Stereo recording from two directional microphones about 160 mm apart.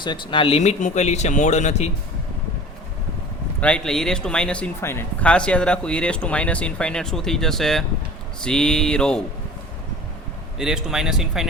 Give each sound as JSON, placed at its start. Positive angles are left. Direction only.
{"t": 0.0, "sound": "speech", "side_deg": 30}
{"t": 3.6, "sound": "speech", "side_deg": 5}
{"t": 10.6, "sound": "speech", "side_deg": -5}